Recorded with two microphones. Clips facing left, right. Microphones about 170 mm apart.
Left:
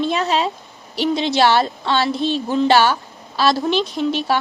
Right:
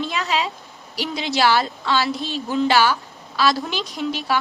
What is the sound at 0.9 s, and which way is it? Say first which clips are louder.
A woman's voice: left 6 dB; 25° left (ahead or behind).